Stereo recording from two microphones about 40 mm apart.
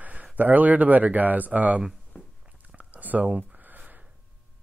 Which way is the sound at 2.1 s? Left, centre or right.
Left.